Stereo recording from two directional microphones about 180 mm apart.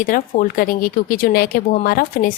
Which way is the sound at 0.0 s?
50° left (ahead or behind).